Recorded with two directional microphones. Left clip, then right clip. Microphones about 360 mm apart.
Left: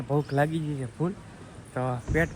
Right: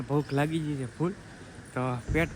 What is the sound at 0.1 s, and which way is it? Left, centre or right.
Speech, centre.